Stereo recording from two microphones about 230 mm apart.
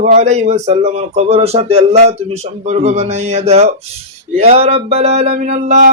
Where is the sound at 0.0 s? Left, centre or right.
Right.